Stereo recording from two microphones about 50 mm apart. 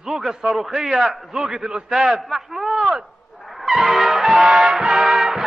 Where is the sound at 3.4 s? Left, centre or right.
Centre.